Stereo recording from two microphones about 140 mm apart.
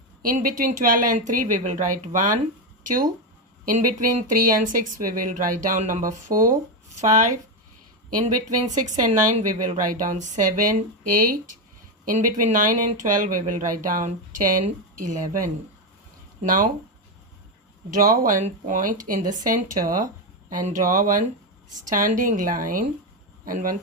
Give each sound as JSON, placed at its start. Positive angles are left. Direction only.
{"t": 0.2, "sound": "speech", "side_deg": -85}
{"t": 3.7, "sound": "speech", "side_deg": -70}
{"t": 8.2, "sound": "speech", "side_deg": -55}
{"t": 12.0, "sound": "speech", "side_deg": -65}
{"t": 17.9, "sound": "speech", "side_deg": -80}
{"t": 18.4, "sound": "speech", "side_deg": -70}